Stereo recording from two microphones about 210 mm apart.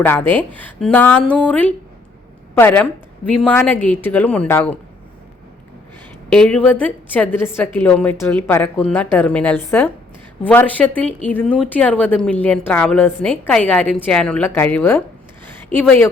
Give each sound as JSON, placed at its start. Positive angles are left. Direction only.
{"t": 0.0, "sound": "a woman's voice", "side_deg": 10}
{"t": 6.3, "sound": "a woman's voice", "side_deg": 5}